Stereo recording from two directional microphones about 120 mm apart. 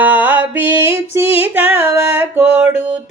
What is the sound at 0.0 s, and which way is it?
Music, 15° right (ahead or behind).